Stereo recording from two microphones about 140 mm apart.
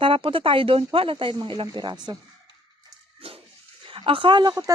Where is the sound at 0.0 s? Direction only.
40° right (ahead or behind).